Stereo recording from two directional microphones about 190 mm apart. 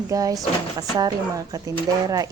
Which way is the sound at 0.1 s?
20° right (ahead or behind).